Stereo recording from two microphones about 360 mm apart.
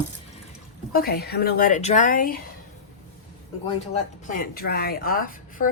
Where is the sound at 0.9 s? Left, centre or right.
Left.